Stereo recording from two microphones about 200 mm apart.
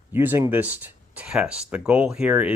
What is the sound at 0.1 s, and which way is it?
Speech, 10° right (ahead or behind).